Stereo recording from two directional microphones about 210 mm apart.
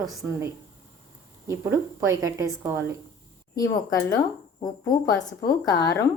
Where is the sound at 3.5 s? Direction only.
15° left (ahead or behind).